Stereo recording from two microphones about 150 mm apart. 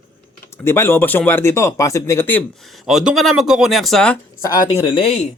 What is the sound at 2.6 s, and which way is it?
Speech, centre (ahead or behind).